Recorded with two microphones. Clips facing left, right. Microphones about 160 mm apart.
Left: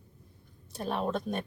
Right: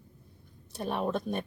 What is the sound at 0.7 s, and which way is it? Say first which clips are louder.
Speech: right 1 dB; centre (ahead or behind).